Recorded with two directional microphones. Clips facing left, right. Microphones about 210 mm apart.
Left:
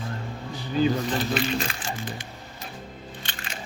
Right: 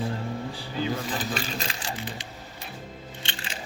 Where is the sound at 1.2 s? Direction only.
40° right (ahead or behind).